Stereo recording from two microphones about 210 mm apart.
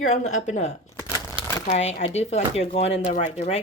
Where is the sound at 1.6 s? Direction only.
30° left (ahead or behind).